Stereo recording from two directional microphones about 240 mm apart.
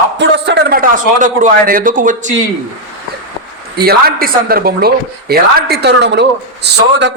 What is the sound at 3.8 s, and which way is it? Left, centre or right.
A man's voice, right.